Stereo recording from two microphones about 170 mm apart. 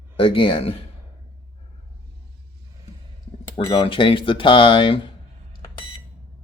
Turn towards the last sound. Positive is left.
turn(degrees=30)  # may be behind; listen again after turning